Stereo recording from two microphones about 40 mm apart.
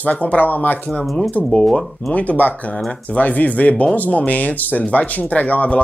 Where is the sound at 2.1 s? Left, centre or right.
Left.